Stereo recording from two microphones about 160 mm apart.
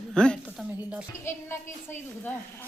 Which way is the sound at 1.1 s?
15° left (ahead or behind).